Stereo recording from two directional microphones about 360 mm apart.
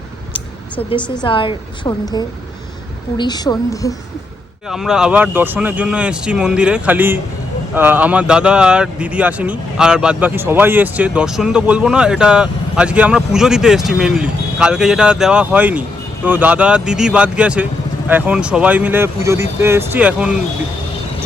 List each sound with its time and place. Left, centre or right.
0.3 s a woman's voice: centre
4.7 s speech: centre